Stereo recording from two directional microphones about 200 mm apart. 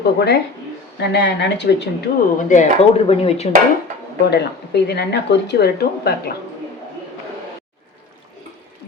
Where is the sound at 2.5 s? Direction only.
40° left (ahead or behind).